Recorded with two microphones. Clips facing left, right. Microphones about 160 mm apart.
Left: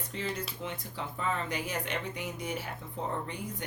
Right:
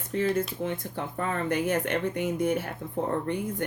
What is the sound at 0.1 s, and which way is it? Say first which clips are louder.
Speech: right 11 dB; 50° right (ahead or behind).